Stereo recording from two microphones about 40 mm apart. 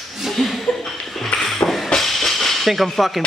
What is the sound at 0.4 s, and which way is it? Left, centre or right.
Speech, centre.